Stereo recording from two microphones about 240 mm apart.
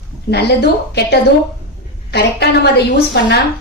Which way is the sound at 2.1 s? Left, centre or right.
Left.